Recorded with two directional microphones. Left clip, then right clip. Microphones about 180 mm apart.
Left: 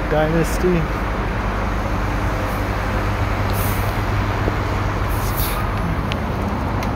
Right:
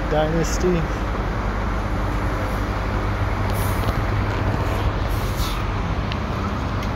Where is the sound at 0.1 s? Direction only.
15° left (ahead or behind).